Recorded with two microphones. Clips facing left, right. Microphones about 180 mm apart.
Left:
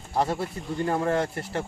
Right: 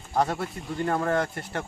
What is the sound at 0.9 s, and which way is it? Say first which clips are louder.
Speech: even; 25° left (ahead or behind).